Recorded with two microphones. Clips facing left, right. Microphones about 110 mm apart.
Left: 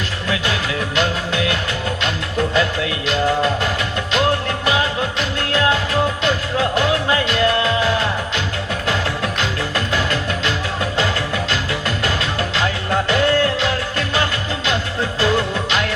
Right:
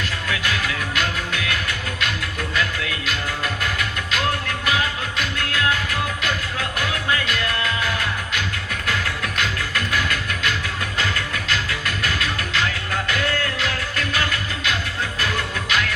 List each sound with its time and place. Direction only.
0.3 s music: 25° left (ahead or behind)
2.6 s music: 25° left (ahead or behind)